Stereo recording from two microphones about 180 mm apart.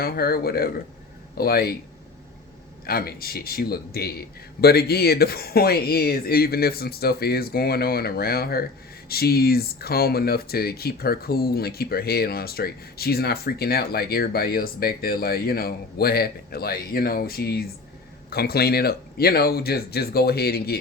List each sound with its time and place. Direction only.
0.0 s speech: 60° left (ahead or behind)
2.8 s speech: 55° left (ahead or behind)